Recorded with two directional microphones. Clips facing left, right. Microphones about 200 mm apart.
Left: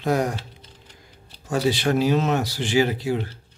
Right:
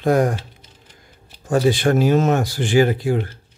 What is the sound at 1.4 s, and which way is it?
Speech, 50° right (ahead or behind).